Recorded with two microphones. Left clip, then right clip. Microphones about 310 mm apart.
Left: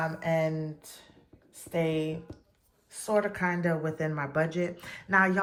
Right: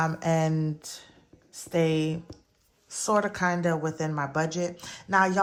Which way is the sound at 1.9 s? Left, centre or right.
Right.